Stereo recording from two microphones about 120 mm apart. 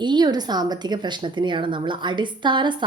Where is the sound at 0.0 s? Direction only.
35° right (ahead or behind).